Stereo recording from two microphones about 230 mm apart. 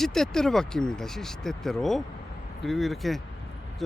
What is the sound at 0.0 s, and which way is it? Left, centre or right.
Speech, centre.